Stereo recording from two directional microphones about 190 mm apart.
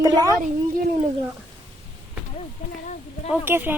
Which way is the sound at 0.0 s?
20° right (ahead or behind).